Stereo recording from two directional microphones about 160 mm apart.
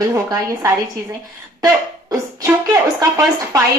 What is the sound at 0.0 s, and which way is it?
Speech, 20° right (ahead or behind).